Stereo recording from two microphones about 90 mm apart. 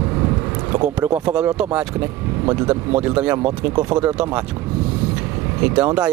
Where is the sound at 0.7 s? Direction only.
20° right (ahead or behind).